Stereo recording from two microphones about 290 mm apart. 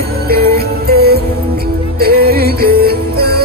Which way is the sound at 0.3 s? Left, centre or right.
Right.